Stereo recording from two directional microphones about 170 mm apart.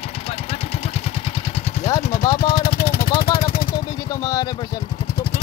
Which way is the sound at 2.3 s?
60° left (ahead or behind).